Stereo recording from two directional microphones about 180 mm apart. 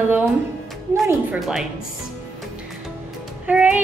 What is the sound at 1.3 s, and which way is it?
Speech, centre (ahead or behind).